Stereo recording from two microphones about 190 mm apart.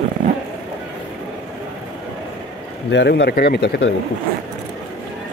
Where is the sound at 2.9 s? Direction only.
65° left (ahead or behind).